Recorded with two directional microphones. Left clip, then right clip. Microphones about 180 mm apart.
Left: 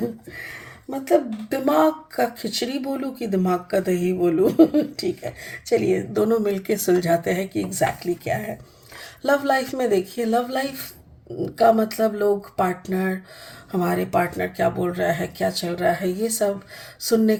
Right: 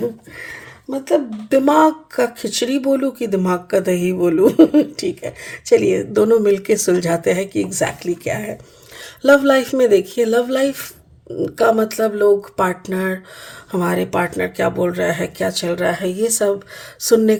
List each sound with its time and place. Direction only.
0.3 s speech: 35° right (ahead or behind)